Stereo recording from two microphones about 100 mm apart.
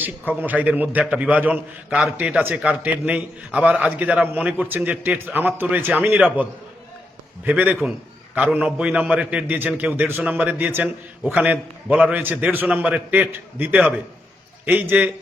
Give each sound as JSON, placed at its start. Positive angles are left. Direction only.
{"t": 0.0, "sound": "a man's voice", "side_deg": -20}